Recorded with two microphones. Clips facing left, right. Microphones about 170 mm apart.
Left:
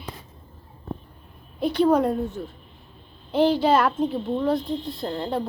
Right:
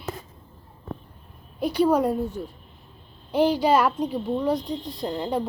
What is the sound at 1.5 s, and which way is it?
A child's voice, 10° right (ahead or behind).